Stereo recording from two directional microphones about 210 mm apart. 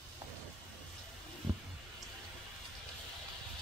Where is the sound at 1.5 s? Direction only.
20° right (ahead or behind).